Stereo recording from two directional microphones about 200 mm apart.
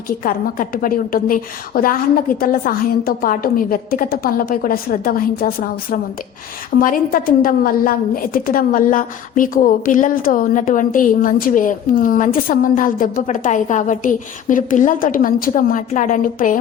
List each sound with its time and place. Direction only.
0.2 s a woman's voice: 45° left (ahead or behind)